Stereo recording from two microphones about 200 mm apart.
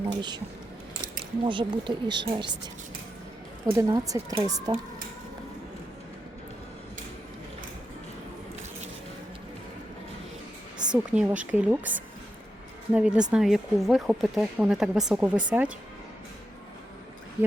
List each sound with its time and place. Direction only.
0.0 s speech: 25° right (ahead or behind)
1.5 s speech: 25° right (ahead or behind)
3.7 s speech: 15° right (ahead or behind)
10.9 s speech: 5° right (ahead or behind)
12.9 s a woman's voice: 5° right (ahead or behind)